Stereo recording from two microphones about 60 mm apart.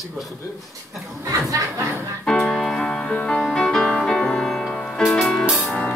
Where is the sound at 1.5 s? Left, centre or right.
Right.